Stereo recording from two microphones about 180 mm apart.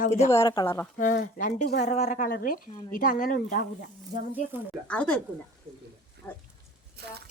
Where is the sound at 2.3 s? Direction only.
55° left (ahead or behind).